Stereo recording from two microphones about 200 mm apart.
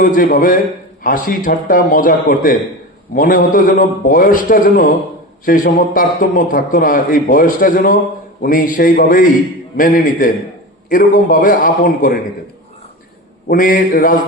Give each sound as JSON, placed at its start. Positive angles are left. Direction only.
{"t": 0.0, "sound": "a man's voice", "side_deg": 40}
{"t": 13.5, "sound": "a man's voice", "side_deg": 45}